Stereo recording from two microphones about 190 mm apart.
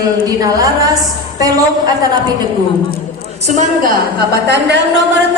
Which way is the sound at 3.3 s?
40° right (ahead or behind).